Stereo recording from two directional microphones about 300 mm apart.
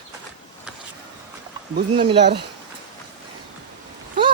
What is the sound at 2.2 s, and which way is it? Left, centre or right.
Speech, right.